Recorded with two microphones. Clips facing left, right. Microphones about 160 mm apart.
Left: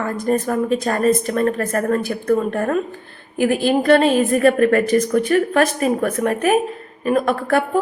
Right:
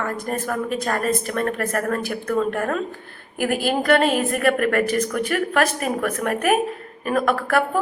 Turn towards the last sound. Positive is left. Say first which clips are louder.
# left 3 dB
turn(degrees=30)  # may be behind; listen again after turning